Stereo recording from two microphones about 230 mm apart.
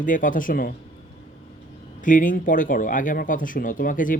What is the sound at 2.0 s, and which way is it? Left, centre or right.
Speech, left.